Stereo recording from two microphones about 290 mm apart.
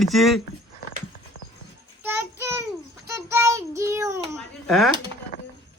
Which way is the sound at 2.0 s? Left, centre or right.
Centre.